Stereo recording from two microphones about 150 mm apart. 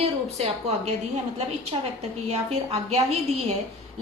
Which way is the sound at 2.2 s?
45° right (ahead or behind).